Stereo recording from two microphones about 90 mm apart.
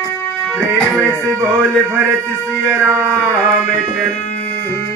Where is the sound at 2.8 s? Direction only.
20° right (ahead or behind).